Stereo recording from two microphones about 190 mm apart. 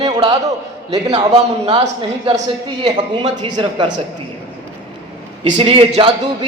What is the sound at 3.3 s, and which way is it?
Speech, 25° right (ahead or behind).